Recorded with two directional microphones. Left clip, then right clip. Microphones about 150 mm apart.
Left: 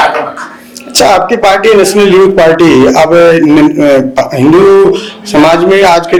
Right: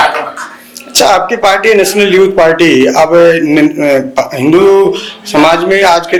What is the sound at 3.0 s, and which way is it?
Speech, 25° left (ahead or behind).